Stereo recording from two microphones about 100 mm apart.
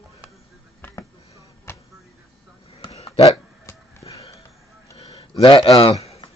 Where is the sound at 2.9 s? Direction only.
90° left.